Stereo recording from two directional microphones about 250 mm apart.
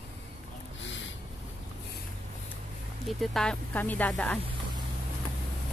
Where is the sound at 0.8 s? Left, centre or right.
Left.